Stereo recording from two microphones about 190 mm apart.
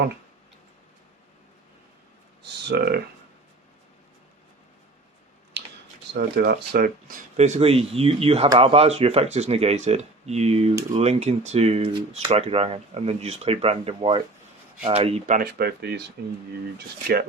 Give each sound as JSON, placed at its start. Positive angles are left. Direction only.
{"t": 2.4, "sound": "speech", "side_deg": -60}
{"t": 5.6, "sound": "a sound", "side_deg": -65}
{"t": 6.1, "sound": "speech", "side_deg": -55}
{"t": 7.3, "sound": "speech", "side_deg": -35}
{"t": 15.4, "sound": "speech", "side_deg": -55}